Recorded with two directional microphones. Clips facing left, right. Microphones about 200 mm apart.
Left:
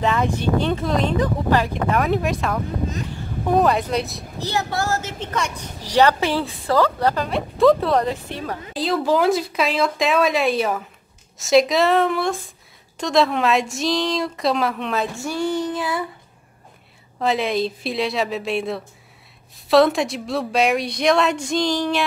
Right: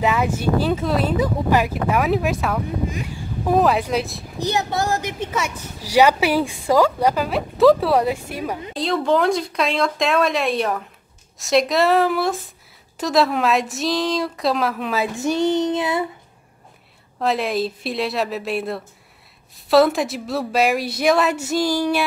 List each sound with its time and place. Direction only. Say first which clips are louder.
0.0 s speech: right 1 dB; 5° right (ahead or behind)
4.4 s a woman's voice: right 2 dB; 15° right (ahead or behind)
8.7 s speech: even; centre (ahead or behind)
15.1 s child singing: right 4 dB; 20° right (ahead or behind)
17.2 s speech: even; centre (ahead or behind)